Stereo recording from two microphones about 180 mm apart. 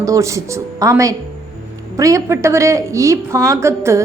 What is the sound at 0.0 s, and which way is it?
A woman's voice, 15° right (ahead or behind).